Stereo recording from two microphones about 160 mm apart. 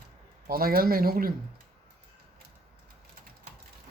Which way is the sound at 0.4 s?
70° right (ahead or behind).